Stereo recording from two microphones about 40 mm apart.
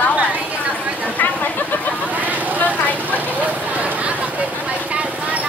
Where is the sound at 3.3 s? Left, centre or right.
Right.